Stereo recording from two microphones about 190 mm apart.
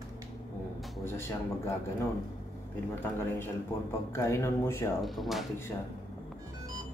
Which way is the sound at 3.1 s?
10° left (ahead or behind).